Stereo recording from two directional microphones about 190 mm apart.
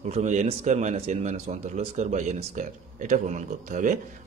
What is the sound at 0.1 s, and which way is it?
A man's voice, 35° right (ahead or behind).